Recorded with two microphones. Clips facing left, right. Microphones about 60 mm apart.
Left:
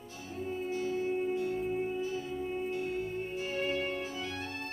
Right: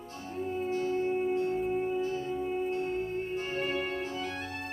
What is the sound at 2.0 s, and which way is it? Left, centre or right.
Music, right.